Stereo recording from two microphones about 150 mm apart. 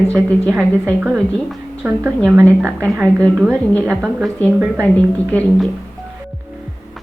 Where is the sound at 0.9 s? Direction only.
5° right (ahead or behind).